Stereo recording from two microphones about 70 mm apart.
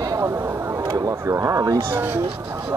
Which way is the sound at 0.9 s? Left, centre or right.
Right.